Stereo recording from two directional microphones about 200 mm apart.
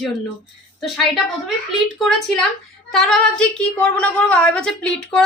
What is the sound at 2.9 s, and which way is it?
A woman's voice, centre (ahead or behind).